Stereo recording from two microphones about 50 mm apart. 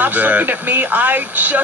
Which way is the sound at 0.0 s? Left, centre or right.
Right.